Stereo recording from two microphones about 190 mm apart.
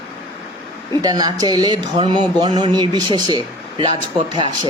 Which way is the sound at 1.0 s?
20° right (ahead or behind).